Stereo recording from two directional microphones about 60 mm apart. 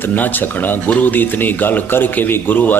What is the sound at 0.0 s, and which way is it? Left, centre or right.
Speech, left.